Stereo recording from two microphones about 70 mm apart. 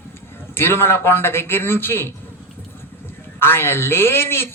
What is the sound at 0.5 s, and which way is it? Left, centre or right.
Speech, left.